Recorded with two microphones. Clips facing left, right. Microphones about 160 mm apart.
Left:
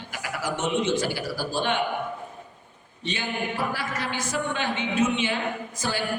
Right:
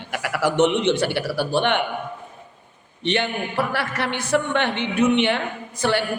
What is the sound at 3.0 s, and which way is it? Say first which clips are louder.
A man's voice: right 6 dB; 65° right (ahead or behind).